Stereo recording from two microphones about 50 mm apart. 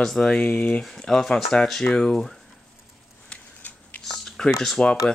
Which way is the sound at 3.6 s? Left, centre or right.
Left.